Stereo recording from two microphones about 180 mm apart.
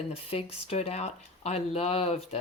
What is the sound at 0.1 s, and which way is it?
Speech, 35° left (ahead or behind).